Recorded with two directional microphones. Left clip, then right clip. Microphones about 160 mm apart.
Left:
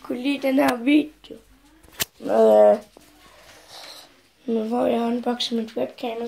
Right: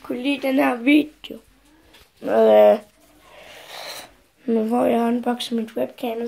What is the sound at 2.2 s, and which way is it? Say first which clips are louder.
Speech: right 1 dB; 25° right (ahead or behind).